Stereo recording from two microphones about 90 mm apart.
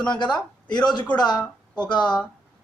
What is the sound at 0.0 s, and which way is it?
A man's voice, 55° left (ahead or behind).